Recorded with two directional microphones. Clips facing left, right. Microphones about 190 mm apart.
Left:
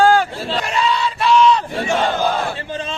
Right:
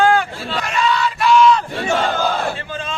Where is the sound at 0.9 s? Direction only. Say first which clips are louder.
Right 1 dB; 30° left (ahead or behind).